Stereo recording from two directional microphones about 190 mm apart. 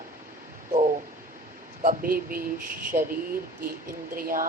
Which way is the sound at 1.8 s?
45° right (ahead or behind).